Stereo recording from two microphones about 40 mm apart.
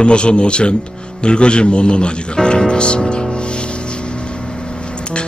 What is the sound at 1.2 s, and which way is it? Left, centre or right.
Music, left.